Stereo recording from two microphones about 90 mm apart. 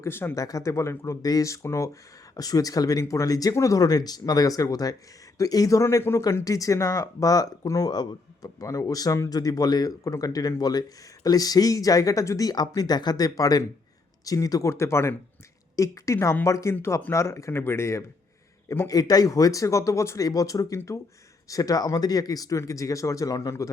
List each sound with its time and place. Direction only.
0.0 s speech: 25° left (ahead or behind)
0.3 s speech: 40° left (ahead or behind)
1.2 s speech: 40° left (ahead or behind)
2.3 s speech: 45° left (ahead or behind)
18.9 s speech: 45° left (ahead or behind)